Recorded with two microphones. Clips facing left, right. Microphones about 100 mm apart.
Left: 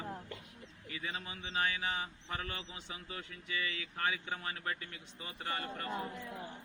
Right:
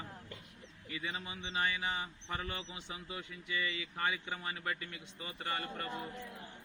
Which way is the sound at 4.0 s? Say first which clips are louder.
Left 1 dB; 15° right (ahead or behind).